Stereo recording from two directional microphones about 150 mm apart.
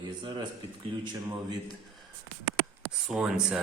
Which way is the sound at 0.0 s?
30° right (ahead or behind).